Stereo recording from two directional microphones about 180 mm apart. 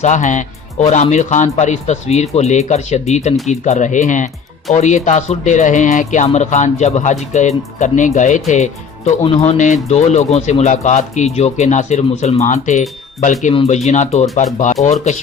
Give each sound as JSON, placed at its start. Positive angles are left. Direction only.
{"t": 0.0, "sound": "speech", "side_deg": 40}